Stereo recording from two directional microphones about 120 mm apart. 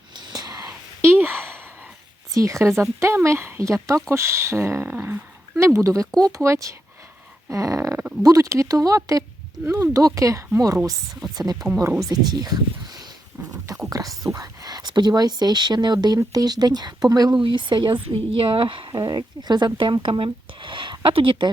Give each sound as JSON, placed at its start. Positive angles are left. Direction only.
{"t": 0.2, "sound": "a sound", "side_deg": -35}
{"t": 1.1, "sound": "a sound", "side_deg": -15}
{"t": 2.3, "sound": "speech", "side_deg": -25}
{"t": 6.1, "sound": "speech", "side_deg": 5}
{"t": 6.3, "sound": "speech", "side_deg": -25}
{"t": 14.3, "sound": "speech", "side_deg": -30}